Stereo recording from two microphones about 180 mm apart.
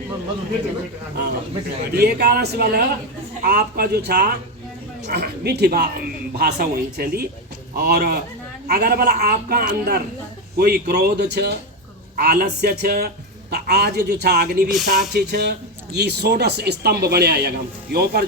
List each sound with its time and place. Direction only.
2.0 s speech: 60° right (ahead or behind)
14.7 s speech: centre (ahead or behind)
15.1 s speech: 65° right (ahead or behind)